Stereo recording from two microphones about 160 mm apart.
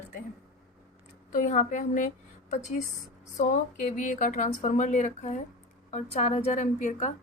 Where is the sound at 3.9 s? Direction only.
55° left (ahead or behind).